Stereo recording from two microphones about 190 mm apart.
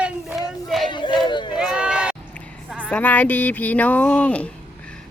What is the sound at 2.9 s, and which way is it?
Speech, 10° left (ahead or behind).